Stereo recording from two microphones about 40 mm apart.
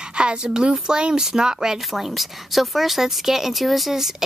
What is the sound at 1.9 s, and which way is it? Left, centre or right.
A woman's voice, centre.